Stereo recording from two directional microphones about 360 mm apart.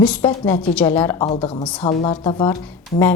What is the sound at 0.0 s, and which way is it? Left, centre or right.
A woman's voice, centre.